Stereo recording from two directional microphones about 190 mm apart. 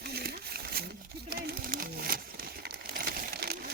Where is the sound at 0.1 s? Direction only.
55° right (ahead or behind).